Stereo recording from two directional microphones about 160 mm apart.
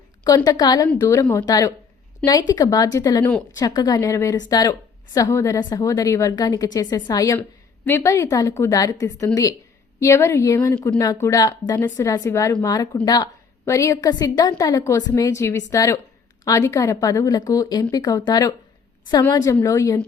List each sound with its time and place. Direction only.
0.3 s a woman's voice: 20° left (ahead or behind)